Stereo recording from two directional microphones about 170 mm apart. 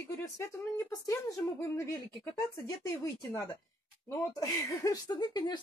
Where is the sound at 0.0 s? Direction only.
15° left (ahead or behind).